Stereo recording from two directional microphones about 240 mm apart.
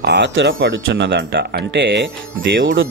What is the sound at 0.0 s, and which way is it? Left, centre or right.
Speech, right.